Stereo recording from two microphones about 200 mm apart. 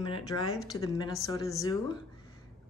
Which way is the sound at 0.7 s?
15° left (ahead or behind).